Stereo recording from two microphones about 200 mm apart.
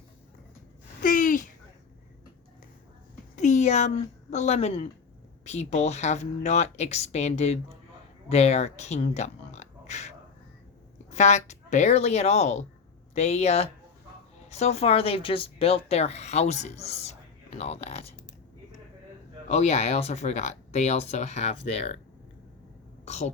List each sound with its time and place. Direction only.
1.0 s a sound: 40° left (ahead or behind)
3.3 s a woman's voice: 35° left (ahead or behind)
19.5 s a woman's voice: 35° left (ahead or behind)
23.0 s a woman's voice: 35° left (ahead or behind)